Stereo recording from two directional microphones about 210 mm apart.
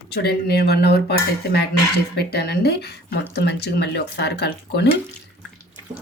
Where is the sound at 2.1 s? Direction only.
50° left (ahead or behind).